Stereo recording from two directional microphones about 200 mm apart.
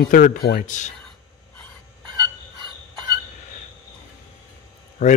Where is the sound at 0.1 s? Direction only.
40° left (ahead or behind).